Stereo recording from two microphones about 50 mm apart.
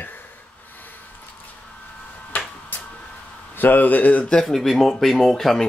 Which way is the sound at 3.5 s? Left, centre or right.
Left.